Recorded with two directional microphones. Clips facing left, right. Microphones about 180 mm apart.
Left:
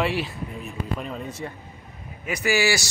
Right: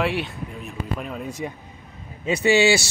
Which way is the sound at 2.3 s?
25° right (ahead or behind).